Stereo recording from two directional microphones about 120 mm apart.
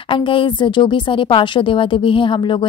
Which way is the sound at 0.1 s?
45° left (ahead or behind).